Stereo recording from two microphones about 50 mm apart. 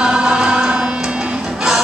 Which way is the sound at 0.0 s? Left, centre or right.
Centre.